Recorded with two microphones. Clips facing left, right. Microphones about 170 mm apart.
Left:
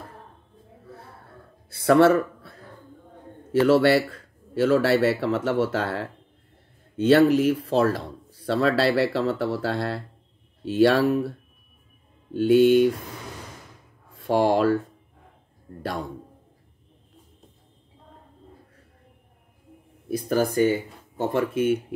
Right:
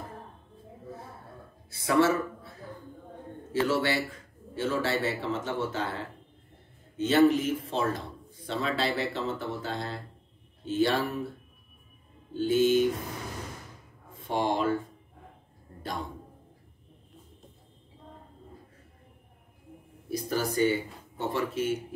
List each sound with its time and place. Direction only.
1.7 s speech: 65° left (ahead or behind)
3.5 s a man's voice: 65° left (ahead or behind)
7.1 s a man's voice: 70° left (ahead or behind)
12.4 s speech: 65° left (ahead or behind)
14.2 s a man's voice: 70° left (ahead or behind)
20.1 s speech: 50° left (ahead or behind)